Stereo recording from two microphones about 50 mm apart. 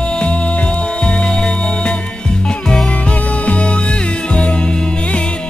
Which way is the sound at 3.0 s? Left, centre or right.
Left.